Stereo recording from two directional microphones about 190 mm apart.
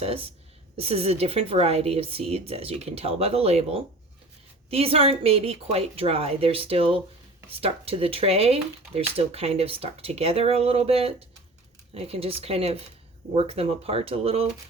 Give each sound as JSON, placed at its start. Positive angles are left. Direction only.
{"t": 0.0, "sound": "a woman's voice", "side_deg": -30}